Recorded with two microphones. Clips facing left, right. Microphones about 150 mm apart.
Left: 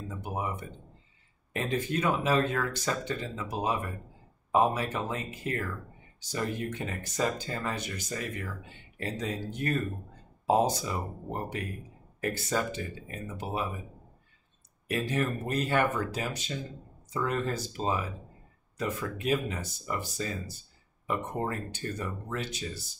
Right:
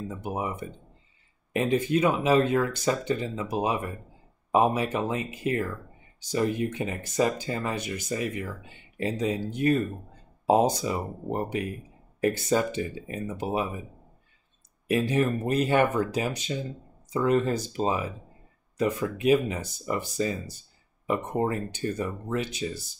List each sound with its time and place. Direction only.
0.2 s speech: 15° right (ahead or behind)
1.5 s speech: 15° right (ahead or behind)
14.9 s speech: 20° right (ahead or behind)